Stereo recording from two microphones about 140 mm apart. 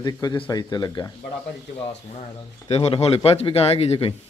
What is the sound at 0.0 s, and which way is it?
Speech, 30° left (ahead or behind).